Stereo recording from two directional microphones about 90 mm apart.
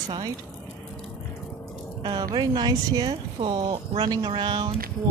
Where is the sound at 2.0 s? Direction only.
55° right (ahead or behind).